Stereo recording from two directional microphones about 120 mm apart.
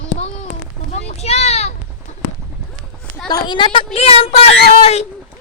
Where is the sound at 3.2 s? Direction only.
35° left (ahead or behind).